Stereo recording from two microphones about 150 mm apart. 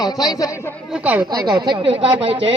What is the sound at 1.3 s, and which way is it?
Speech, 30° right (ahead or behind).